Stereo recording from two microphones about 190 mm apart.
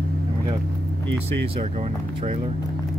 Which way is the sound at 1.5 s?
30° right (ahead or behind).